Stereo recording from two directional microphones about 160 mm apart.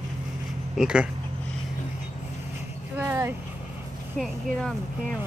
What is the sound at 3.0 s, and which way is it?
Vehicle, 15° right (ahead or behind).